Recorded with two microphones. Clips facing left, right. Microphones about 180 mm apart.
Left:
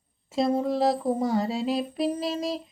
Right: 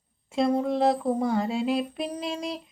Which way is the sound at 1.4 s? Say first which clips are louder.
Right 1 dB; 40° left (ahead or behind).